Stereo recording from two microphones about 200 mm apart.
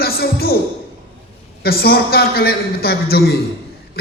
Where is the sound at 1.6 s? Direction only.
50° left (ahead or behind).